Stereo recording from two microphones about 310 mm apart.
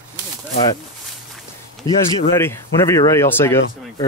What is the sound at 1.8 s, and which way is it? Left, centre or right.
Speech, centre.